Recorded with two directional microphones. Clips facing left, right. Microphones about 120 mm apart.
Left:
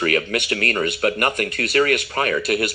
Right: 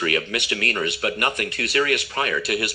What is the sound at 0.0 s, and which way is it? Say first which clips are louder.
Speech: left 3 dB; 45° left (ahead or behind).